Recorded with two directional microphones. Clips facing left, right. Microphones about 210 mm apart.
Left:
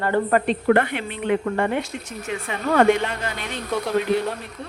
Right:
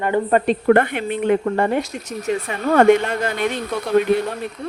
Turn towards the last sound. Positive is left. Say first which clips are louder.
# right 4 dB
turn(degrees=0)  # may be behind; listen again after turning